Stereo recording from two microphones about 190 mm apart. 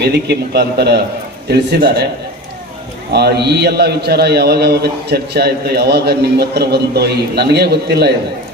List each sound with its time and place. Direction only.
0.0 s a man's voice: 60° right (ahead or behind)
3.1 s a man's voice: 60° right (ahead or behind)